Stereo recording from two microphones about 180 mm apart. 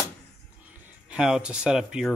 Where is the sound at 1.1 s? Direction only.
5° right (ahead or behind).